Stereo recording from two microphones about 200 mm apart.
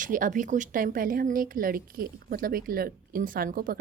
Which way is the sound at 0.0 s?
40° right (ahead or behind).